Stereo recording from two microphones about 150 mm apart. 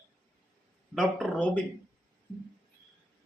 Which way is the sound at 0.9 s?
Centre (ahead or behind).